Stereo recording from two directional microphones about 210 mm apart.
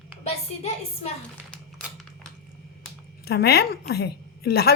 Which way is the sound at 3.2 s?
50° left (ahead or behind).